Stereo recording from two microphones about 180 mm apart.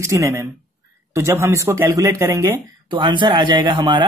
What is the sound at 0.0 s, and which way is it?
Speech, 15° right (ahead or behind).